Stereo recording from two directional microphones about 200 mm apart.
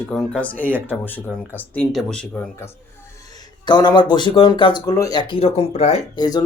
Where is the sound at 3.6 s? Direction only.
20° left (ahead or behind).